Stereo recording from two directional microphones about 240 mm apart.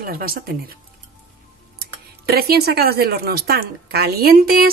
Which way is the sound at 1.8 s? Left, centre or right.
Right.